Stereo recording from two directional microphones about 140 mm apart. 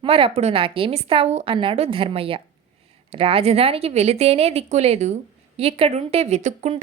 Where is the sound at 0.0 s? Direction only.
40° right (ahead or behind).